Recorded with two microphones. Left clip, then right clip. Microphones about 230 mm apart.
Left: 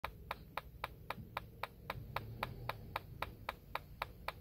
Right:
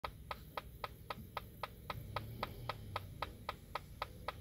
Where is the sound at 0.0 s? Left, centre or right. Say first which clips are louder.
Left 1 dB; left.